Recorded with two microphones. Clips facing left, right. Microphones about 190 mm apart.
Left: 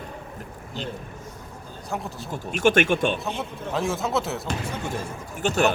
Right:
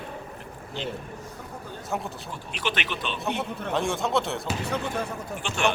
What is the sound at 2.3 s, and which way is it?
Speech, 45° left (ahead or behind).